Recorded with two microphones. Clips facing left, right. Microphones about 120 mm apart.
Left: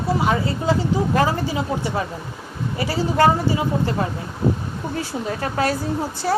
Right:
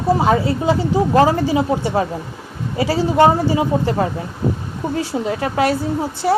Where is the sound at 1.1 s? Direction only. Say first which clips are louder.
Right 6 dB; 30° right (ahead or behind).